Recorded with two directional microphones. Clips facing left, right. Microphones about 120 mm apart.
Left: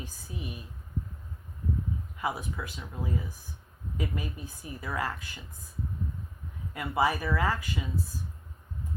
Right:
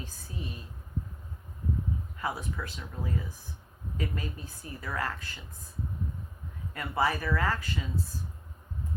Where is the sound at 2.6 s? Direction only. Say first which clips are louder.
Even; 15° left (ahead or behind).